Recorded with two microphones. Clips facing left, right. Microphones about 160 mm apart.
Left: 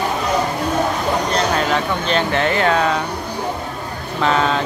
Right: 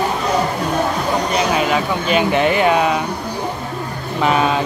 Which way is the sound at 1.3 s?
10° right (ahead or behind).